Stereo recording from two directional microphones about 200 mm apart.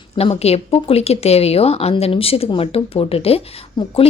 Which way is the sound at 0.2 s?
30° left (ahead or behind).